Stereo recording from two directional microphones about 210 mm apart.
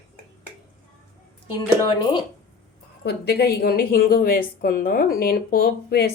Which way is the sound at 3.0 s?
50° left (ahead or behind).